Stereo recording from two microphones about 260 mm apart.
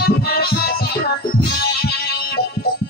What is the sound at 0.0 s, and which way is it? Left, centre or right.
Music, left.